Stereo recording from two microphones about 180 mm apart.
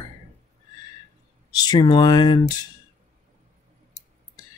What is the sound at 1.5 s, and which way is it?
Speech, 25° left (ahead or behind).